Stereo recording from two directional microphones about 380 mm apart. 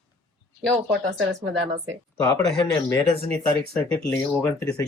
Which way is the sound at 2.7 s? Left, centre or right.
Centre.